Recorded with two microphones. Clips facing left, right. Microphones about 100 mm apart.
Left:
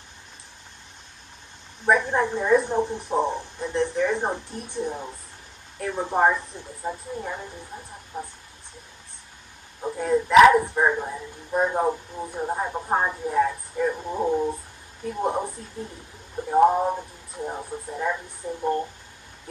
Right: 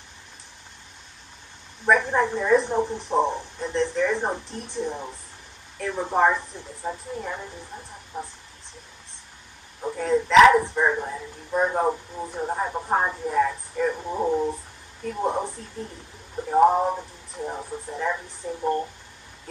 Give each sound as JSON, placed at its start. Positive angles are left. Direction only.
{"t": 1.9, "sound": "speech", "side_deg": 15}
{"t": 3.5, "sound": "speech", "side_deg": 15}
{"t": 4.7, "sound": "speech", "side_deg": 0}
{"t": 9.9, "sound": "speech", "side_deg": 15}
{"t": 17.9, "sound": "speech", "side_deg": 10}
{"t": 18.4, "sound": "speech", "side_deg": 0}